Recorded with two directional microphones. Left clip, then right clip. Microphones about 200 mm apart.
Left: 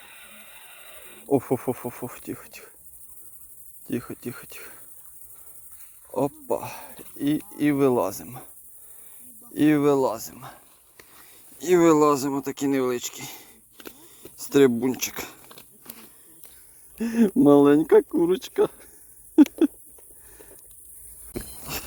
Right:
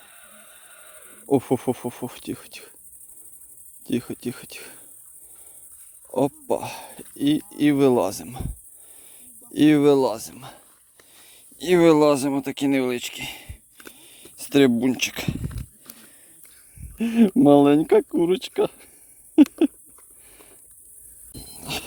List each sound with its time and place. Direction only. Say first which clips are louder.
1.3 s speech: right 2 dB; 45° right (ahead or behind)
3.8 s speech: right 4 dB; 45° right (ahead or behind)
6.1 s speech: right 3 dB; 45° right (ahead or behind)
15.9 s a sound: left 1 dB; 40° right (ahead or behind)
16.9 s speech: right 3 dB; 35° right (ahead or behind)
19.4 s a sound: right 1 dB; 30° right (ahead or behind)
21.6 s vehicle: right 7 dB; 40° right (ahead or behind)